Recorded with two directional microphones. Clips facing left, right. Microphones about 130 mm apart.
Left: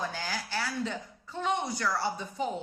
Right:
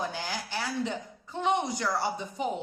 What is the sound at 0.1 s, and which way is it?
A woman's voice, 20° right (ahead or behind).